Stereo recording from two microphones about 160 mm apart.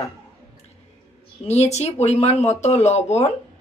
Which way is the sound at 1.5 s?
45° left (ahead or behind).